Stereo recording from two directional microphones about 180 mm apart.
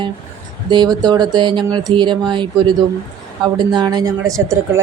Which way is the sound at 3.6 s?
25° right (ahead or behind).